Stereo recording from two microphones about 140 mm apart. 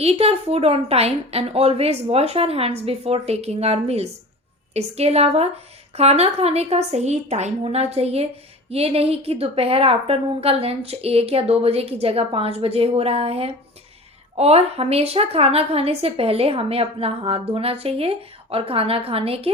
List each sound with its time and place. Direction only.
0.0 s a woman's voice: 45° right (ahead or behind)